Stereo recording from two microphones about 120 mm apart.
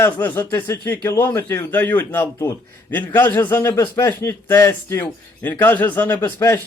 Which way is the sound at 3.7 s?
30° left (ahead or behind).